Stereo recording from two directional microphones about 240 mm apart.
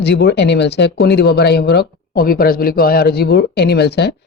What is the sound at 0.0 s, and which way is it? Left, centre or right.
Speech, left.